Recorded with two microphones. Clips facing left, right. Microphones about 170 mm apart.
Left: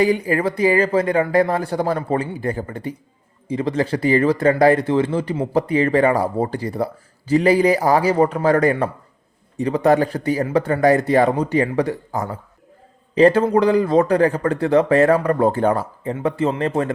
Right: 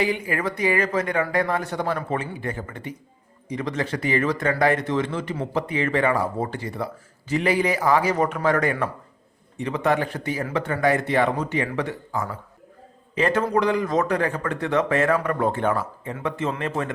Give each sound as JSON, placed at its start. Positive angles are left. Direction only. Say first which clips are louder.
{"t": 0.0, "sound": "speech", "louder": "left 7 dB", "side_deg": 35}